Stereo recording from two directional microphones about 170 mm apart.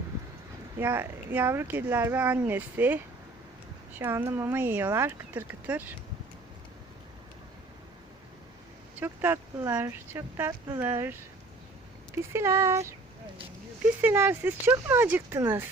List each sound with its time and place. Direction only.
0.8 s speech: 10° right (ahead or behind)
9.0 s speech: 15° right (ahead or behind)
12.1 s speech: 15° right (ahead or behind)
14.0 s speech: 10° right (ahead or behind)